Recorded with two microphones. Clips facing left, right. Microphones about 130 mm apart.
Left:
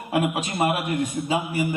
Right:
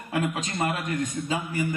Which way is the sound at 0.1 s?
15° left (ahead or behind).